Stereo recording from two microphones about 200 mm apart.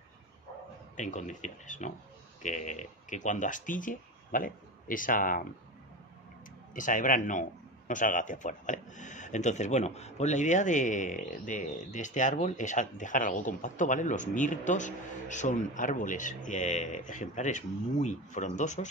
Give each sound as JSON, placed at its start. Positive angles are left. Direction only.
{"t": 0.9, "sound": "a man's voice", "side_deg": 40}
{"t": 6.7, "sound": "a man's voice", "side_deg": 40}